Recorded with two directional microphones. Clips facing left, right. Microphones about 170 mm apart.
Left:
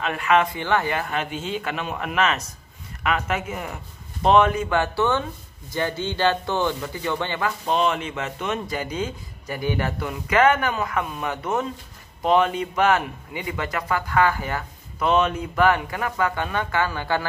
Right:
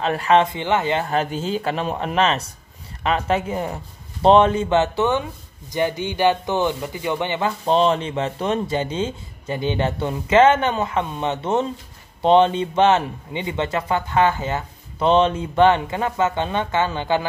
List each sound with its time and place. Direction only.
0.0 s a man's voice: 35° right (ahead or behind)